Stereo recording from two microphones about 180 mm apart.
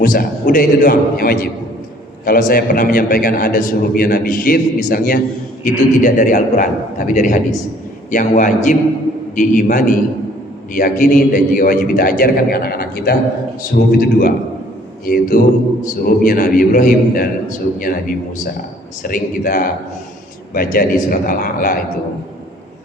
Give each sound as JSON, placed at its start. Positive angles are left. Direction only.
{"t": 0.0, "sound": "a man's voice", "side_deg": 50}